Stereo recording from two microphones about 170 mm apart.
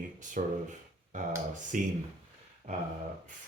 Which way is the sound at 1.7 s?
50° right (ahead or behind).